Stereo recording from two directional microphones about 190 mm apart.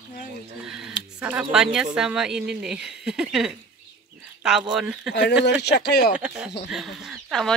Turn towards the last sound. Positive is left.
turn(degrees=0)  # may be behind; listen again after turning